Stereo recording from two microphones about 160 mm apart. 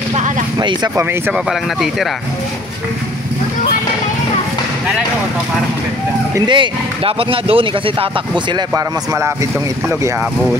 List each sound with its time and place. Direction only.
0.6 s speech: 25° right (ahead or behind)
1.5 s speech: centre (ahead or behind)
6.3 s speech: 30° right (ahead or behind)
8.5 s speech: 20° right (ahead or behind)